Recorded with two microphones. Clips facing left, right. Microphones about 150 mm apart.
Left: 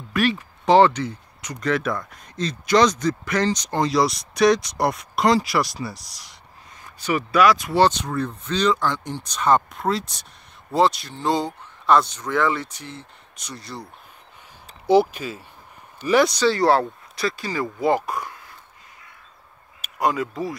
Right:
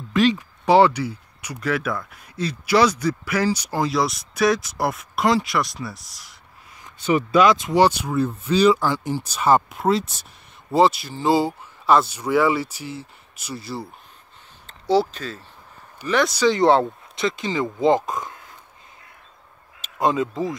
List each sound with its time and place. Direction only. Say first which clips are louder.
0.1 s speech: right 3 dB; 15° right (ahead or behind); by 6.3 s centre (ahead or behind)
6.8 s speech: right 4 dB; 25° right (ahead or behind)
7.8 s speech: right 1 dB; 10° right (ahead or behind)
14.9 s speech: left 3 dB; 10° left (ahead or behind)
16.3 s speech: right 2 dB; 20° right (ahead or behind)
19.8 s speech: right 2 dB; 25° right (ahead or behind)